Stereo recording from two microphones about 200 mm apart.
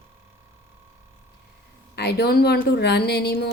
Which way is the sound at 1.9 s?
55° left (ahead or behind).